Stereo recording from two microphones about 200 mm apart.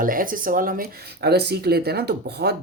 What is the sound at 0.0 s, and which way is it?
Speech, 45° right (ahead or behind).